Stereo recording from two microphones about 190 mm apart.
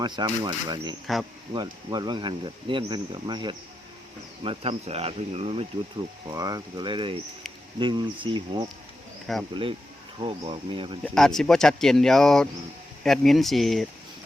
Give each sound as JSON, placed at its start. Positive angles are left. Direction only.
{"t": 0.0, "sound": "speech", "side_deg": -25}
{"t": 6.3, "sound": "speech", "side_deg": -20}
{"t": 9.3, "sound": "speech", "side_deg": 0}
{"t": 10.2, "sound": "speech", "side_deg": -30}
{"t": 11.0, "sound": "speech", "side_deg": 0}